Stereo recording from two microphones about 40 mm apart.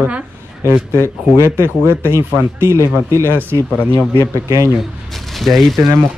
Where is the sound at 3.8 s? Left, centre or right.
Left.